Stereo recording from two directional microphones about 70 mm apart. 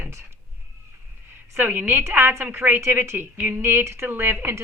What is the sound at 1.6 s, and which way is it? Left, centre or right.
Speech, right.